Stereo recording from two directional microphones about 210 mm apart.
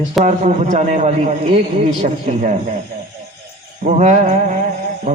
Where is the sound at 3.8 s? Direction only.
35° right (ahead or behind).